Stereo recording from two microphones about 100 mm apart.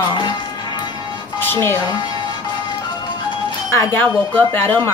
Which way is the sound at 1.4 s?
25° left (ahead or behind).